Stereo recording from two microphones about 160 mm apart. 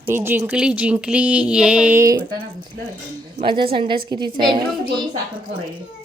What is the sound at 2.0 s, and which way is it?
Speech, 15° right (ahead or behind).